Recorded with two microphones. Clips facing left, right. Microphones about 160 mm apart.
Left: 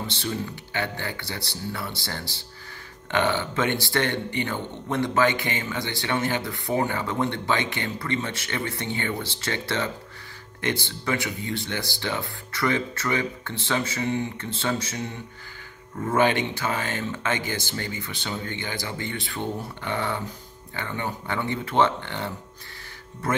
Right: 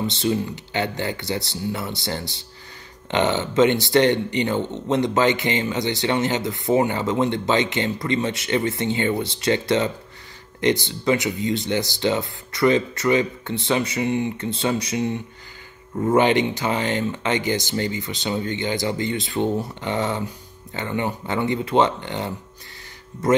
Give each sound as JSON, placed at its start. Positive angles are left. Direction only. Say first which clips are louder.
{"t": 0.0, "sound": "speech", "louder": "right 7 dB", "side_deg": -15}